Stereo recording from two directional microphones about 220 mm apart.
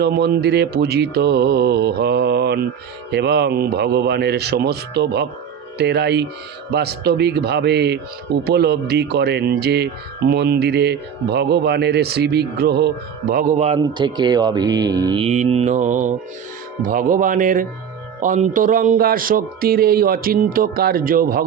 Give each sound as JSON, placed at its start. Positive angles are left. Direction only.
{"t": 0.0, "sound": "speech", "side_deg": -50}
{"t": 13.8, "sound": "speech", "side_deg": -20}